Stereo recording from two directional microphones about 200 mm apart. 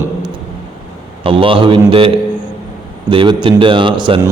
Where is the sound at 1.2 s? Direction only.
25° right (ahead or behind).